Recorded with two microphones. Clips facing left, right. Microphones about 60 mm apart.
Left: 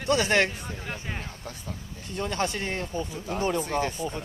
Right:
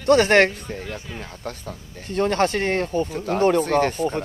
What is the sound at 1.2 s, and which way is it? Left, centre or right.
Speech, right.